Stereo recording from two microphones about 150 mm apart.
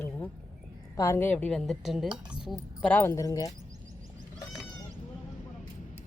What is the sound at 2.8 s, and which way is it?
Speech, 15° left (ahead or behind).